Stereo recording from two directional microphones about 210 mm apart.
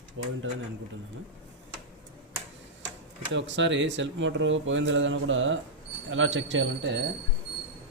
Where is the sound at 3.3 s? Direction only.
60° right (ahead or behind).